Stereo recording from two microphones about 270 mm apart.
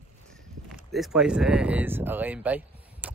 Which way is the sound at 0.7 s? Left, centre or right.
Centre.